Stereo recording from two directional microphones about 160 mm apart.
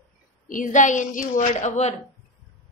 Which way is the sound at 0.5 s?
55° left (ahead or behind).